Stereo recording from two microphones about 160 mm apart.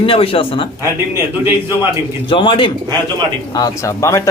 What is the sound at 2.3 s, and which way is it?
Speech, 30° left (ahead or behind).